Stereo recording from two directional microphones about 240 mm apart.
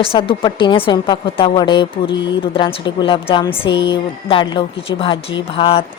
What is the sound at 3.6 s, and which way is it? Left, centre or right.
Speech, left.